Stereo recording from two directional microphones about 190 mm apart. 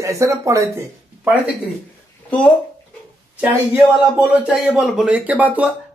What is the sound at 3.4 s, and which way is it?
A man's voice, 10° right (ahead or behind).